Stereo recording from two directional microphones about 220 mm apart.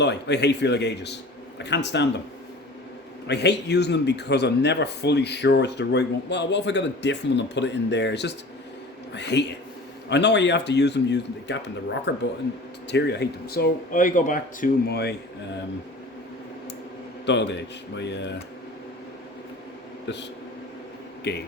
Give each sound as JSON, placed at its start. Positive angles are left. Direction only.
{"t": 0.0, "sound": "speech", "side_deg": 50}
{"t": 3.2, "sound": "speech", "side_deg": 50}
{"t": 17.2, "sound": "a man's voice", "side_deg": 50}
{"t": 20.1, "sound": "speech", "side_deg": 50}
{"t": 21.3, "sound": "speech", "side_deg": 50}